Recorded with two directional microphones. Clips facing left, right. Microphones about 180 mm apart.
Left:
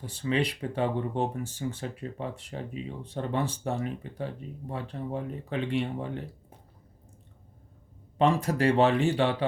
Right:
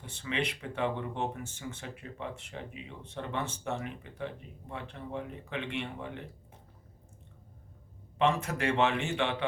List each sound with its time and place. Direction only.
0.0 s speech: 35° left (ahead or behind)
8.2 s speech: 35° left (ahead or behind)